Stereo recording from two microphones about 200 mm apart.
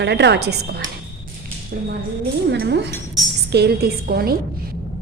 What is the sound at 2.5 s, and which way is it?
A woman's voice, 55° right (ahead or behind).